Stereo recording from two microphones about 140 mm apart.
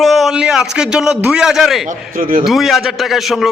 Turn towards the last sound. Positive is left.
turn(degrees=0)  # may be behind; listen again after turning